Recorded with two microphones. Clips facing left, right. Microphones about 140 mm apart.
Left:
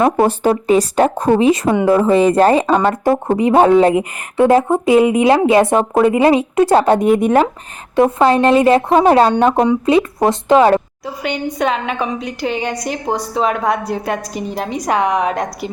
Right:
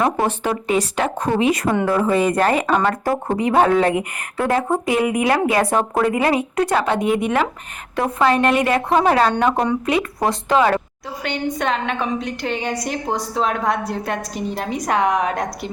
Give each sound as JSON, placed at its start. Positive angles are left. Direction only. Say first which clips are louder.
{"t": 0.2, "sound": "speech", "louder": "left 7 dB", "side_deg": 35}
{"t": 6.9, "sound": "speech", "louder": "left 7 dB", "side_deg": 45}
{"t": 7.9, "sound": "speech", "louder": "left 6 dB", "side_deg": 30}
{"t": 11.0, "sound": "a woman's voice", "louder": "left 3 dB", "side_deg": 5}